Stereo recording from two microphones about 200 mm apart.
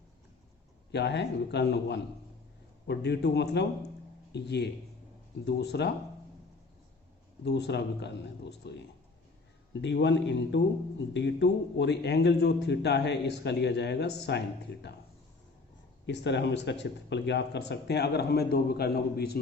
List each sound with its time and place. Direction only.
0.9 s speech: 60° left (ahead or behind)
7.4 s speech: 55° left (ahead or behind)
9.8 s speech: 60° left (ahead or behind)
16.0 s speech: 60° left (ahead or behind)